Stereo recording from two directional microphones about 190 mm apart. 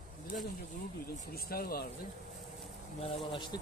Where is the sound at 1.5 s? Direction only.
50° left (ahead or behind).